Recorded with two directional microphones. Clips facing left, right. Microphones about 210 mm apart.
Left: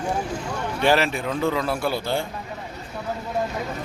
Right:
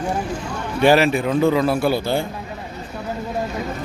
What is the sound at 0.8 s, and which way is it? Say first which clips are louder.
A man's voice: right 6 dB; 10° right (ahead or behind).